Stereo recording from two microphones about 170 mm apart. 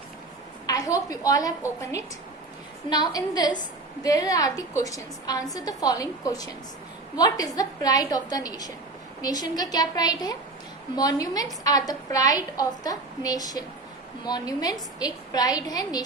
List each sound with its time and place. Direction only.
1.1 s a woman's voice: 20° left (ahead or behind)